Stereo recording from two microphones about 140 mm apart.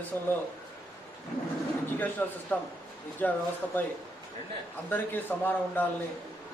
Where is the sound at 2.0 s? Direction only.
10° left (ahead or behind).